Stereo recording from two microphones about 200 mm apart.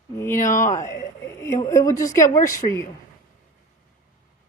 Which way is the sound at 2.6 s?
35° left (ahead or behind).